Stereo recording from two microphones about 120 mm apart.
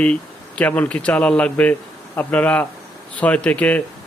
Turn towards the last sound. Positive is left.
turn(degrees=10)  # may be behind; listen again after turning